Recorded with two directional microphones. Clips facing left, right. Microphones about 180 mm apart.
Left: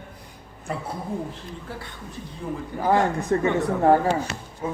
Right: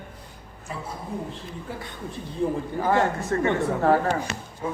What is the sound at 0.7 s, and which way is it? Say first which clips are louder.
Speech: left 4 dB; 60° left (ahead or behind).